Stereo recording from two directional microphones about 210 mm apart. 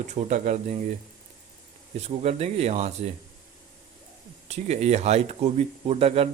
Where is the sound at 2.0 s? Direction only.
30° right (ahead or behind).